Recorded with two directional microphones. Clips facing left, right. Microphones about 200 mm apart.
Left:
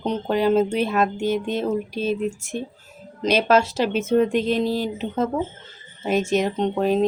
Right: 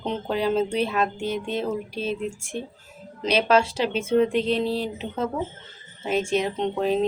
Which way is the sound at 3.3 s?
45° left (ahead or behind).